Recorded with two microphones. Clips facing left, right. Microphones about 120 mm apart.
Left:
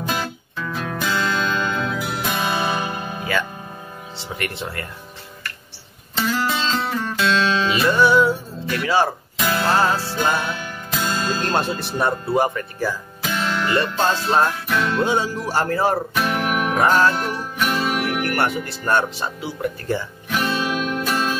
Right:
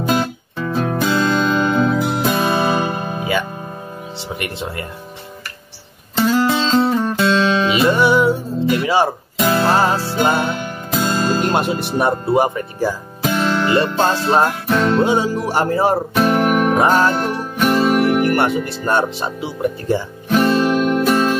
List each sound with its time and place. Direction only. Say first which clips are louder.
0.1 s music: right 9 dB; 30° right (ahead or behind)
4.3 s speech: right 2 dB; 20° right (ahead or behind)
6.2 s music: right 6 dB; 25° right (ahead or behind)
11.3 s speech: right 4 dB; 15° right (ahead or behind)
13.2 s music: right 6 dB; 40° right (ahead or behind)
15.0 s speech: right 5 dB; 20° right (ahead or behind)
16.2 s music: right 7 dB; 40° right (ahead or behind)
16.7 s speech: right 3 dB; 25° right (ahead or behind)
17.2 s music: right 5 dB; 30° right (ahead or behind)
18.2 s speech: right 6 dB; 25° right (ahead or behind)
20.2 s music: right 9 dB; 40° right (ahead or behind)